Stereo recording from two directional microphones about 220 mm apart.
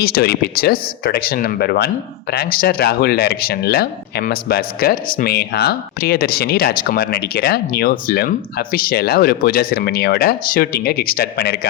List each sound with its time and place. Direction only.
0.0 s speech: 45° left (ahead or behind)